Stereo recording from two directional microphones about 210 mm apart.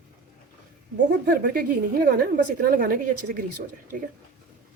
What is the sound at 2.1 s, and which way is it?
Speech, 40° right (ahead or behind).